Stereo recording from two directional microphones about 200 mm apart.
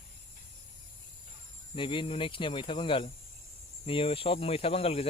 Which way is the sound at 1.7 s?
25° left (ahead or behind).